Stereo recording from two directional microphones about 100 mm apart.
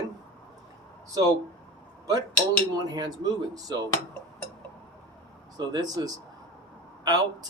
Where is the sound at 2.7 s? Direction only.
40° right (ahead or behind).